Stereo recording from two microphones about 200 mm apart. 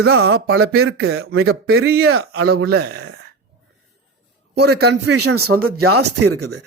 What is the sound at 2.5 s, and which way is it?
Speech, 55° right (ahead or behind).